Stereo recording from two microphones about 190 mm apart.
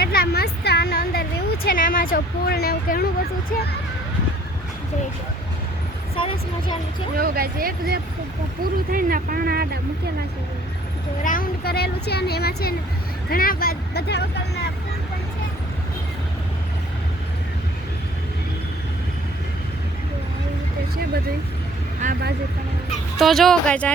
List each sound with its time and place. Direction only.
0.1 s a sound: 55° left (ahead or behind)
6.1 s speech: 25° left (ahead or behind)
7.2 s speech: 50° right (ahead or behind)
11.2 s speech: 45° left (ahead or behind)
22.0 s speech: 40° right (ahead or behind)
23.1 s speech: centre (ahead or behind)